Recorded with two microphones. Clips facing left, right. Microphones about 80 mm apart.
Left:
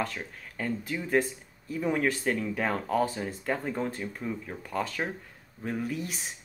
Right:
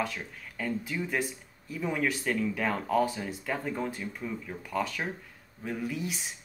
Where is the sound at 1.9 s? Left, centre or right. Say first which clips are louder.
Left 2 dB; left.